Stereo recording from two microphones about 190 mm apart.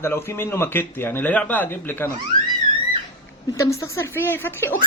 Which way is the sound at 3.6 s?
15° left (ahead or behind).